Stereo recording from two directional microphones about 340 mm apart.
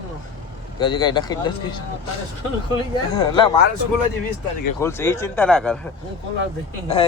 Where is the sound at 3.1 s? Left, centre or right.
Centre.